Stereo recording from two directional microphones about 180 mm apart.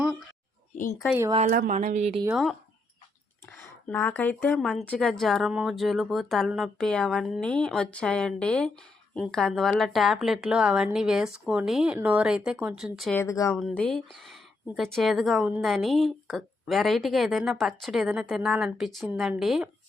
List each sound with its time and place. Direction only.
1.5 s speech: 50° right (ahead or behind)
2.3 s speech: centre (ahead or behind)
3.6 s speech: 5° left (ahead or behind)
13.1 s speech: 15° left (ahead or behind)
13.5 s speech: 5° left (ahead or behind)